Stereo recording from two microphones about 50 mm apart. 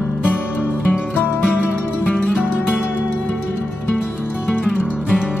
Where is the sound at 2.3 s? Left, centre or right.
Centre.